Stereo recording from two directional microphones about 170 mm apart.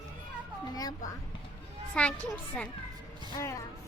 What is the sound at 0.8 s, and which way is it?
Speech, 20° left (ahead or behind).